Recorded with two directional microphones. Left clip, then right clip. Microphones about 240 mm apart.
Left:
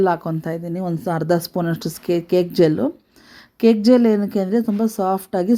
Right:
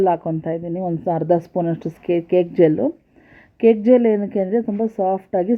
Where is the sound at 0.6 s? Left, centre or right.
Centre.